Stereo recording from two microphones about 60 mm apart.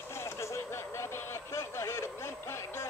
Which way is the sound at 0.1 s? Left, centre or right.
Left.